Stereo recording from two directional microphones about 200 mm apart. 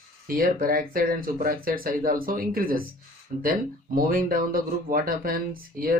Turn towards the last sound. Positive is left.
turn(degrees=-45)  # may be behind; listen again after turning